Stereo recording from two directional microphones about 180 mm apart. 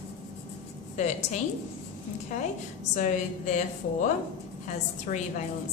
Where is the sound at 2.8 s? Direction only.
45° left (ahead or behind).